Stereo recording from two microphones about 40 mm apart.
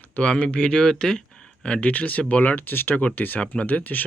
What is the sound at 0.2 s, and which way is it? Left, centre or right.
Speech, left.